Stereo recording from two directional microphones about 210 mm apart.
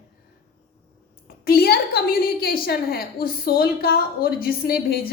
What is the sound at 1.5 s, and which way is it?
A woman's voice, 45° left (ahead or behind).